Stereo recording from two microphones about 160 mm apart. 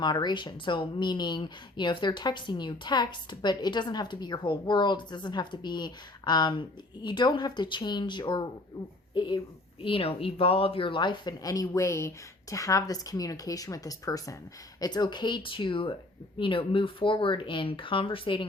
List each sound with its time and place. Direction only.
0.0 s speech: 25° left (ahead or behind)